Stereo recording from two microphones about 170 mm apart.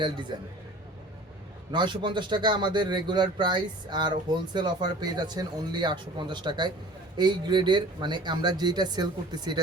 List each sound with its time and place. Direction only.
0.3 s a man's voice: 25° right (ahead or behind)
1.7 s a man's voice: 25° right (ahead or behind)